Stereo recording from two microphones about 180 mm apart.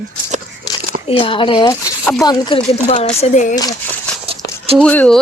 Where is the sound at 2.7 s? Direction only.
35° left (ahead or behind).